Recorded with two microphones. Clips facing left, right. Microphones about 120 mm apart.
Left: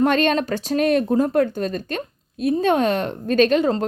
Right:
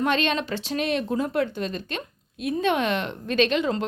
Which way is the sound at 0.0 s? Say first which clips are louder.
Left 6 dB; 45° left (ahead or behind).